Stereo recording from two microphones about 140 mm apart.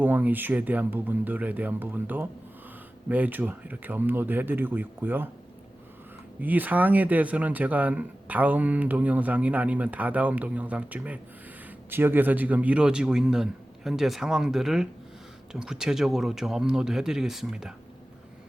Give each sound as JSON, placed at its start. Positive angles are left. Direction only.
{"t": 0.0, "sound": "speech", "side_deg": -15}
{"t": 6.4, "sound": "a man's voice", "side_deg": -10}